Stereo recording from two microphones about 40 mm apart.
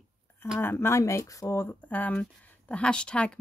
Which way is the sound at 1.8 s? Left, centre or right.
Left.